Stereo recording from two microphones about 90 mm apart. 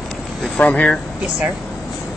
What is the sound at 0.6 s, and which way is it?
Speech, 15° left (ahead or behind).